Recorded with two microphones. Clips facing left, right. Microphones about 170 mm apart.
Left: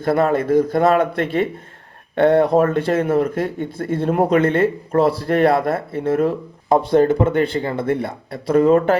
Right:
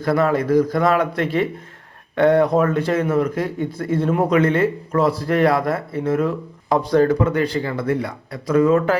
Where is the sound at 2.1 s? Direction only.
30° left (ahead or behind).